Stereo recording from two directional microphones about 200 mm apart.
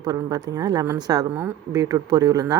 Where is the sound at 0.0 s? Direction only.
20° right (ahead or behind).